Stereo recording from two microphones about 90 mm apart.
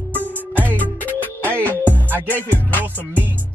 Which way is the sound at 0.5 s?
20° right (ahead or behind).